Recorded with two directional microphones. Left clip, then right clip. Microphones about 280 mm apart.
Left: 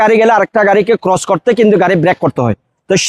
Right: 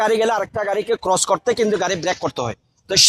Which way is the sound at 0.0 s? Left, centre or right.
Left.